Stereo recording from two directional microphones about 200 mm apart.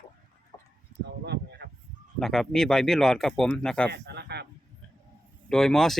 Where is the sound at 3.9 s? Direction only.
55° right (ahead or behind).